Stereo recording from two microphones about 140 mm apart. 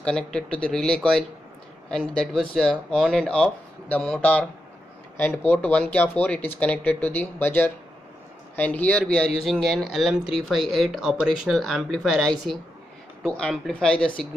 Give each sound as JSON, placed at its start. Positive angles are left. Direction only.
{"t": 0.0, "sound": "speech", "side_deg": 5}